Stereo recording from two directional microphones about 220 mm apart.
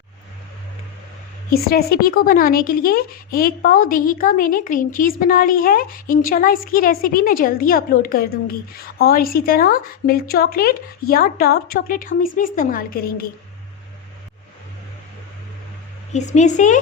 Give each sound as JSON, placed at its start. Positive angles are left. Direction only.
{"t": 1.5, "sound": "a woman's voice", "side_deg": 40}
{"t": 16.1, "sound": "a woman's voice", "side_deg": 30}